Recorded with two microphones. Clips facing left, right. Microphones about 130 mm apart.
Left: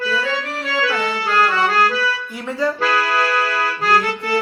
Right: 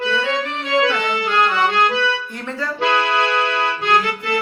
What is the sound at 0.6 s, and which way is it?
Music, 25° right (ahead or behind).